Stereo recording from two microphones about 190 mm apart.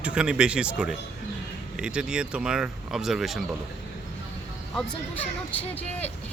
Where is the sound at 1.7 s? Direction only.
5° right (ahead or behind).